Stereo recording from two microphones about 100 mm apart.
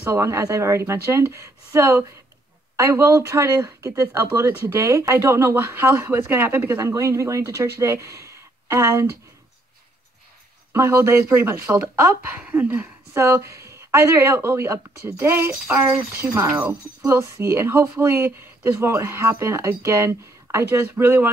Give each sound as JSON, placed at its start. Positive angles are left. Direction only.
{"t": 0.0, "sound": "speech", "side_deg": -25}
{"t": 10.7, "sound": "speech", "side_deg": -25}
{"t": 12.4, "sound": "a woman's voice", "side_deg": -15}